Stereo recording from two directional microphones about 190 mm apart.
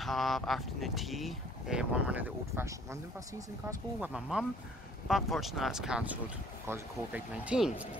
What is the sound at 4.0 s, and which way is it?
Speech, 5° right (ahead or behind).